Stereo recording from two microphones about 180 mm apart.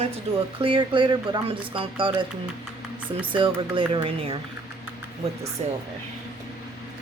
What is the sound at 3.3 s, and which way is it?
Speech, 30° right (ahead or behind).